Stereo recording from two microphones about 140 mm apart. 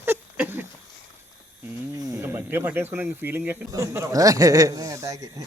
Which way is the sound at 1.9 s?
25° right (ahead or behind).